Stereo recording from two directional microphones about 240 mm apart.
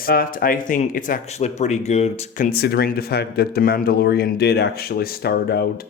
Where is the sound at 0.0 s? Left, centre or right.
Left.